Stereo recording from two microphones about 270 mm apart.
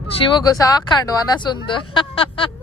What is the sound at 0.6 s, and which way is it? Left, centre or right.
Speech, centre.